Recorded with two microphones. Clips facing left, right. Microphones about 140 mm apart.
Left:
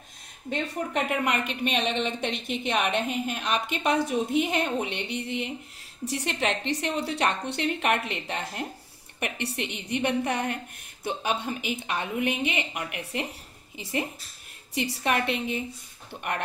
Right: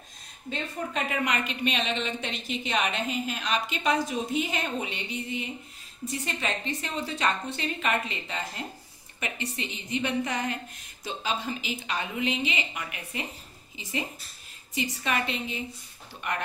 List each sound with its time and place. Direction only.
0.5 s a woman's voice: 65° left (ahead or behind)
12.9 s a woman's voice: 70° left (ahead or behind)
14.7 s a woman's voice: 65° left (ahead or behind)